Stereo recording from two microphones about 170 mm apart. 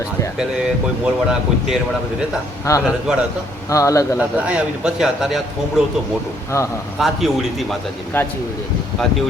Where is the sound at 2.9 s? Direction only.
5° right (ahead or behind).